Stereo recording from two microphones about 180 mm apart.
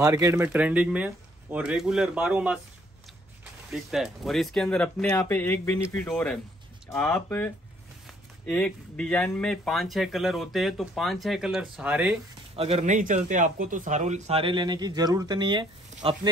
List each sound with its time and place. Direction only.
0.0 s speech: 15° right (ahead or behind)
3.7 s speech: centre (ahead or behind)
12.5 s a man's voice: 35° right (ahead or behind)
15.9 s a sound: 40° right (ahead or behind)